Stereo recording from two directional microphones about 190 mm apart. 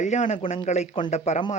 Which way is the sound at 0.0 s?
40° left (ahead or behind).